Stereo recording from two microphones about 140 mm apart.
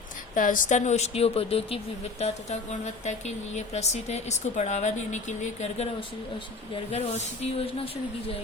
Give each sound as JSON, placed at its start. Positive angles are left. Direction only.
{"t": 0.3, "sound": "speech", "side_deg": 70}
{"t": 6.9, "sound": "speech", "side_deg": 50}